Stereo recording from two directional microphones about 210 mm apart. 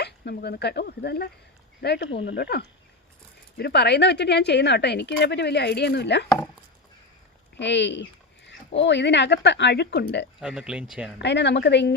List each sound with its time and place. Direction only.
0.0 s a woman's voice: 50° left (ahead or behind)
3.6 s a woman's voice: 55° left (ahead or behind)
7.5 s speech: 55° left (ahead or behind)
10.4 s speech: 5° right (ahead or behind)
11.2 s speech: 55° left (ahead or behind)